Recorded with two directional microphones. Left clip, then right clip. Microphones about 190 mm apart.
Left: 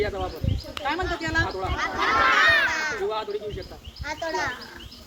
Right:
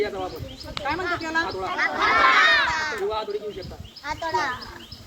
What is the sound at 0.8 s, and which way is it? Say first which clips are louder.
Speech: even; 60° left (ahead or behind).